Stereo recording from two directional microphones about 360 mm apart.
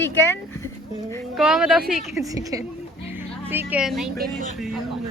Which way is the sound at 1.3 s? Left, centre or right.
Centre.